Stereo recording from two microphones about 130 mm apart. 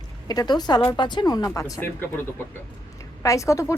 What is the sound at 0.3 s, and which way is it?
A woman's voice, 30° left (ahead or behind).